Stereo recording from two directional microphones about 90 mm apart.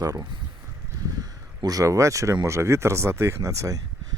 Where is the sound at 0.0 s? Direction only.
40° right (ahead or behind).